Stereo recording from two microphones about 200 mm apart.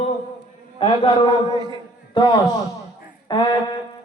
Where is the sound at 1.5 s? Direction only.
20° right (ahead or behind).